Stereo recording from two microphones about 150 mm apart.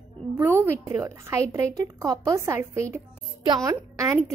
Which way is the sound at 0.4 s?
15° right (ahead or behind).